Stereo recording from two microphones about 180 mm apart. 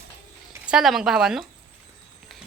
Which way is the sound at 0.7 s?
Centre (ahead or behind).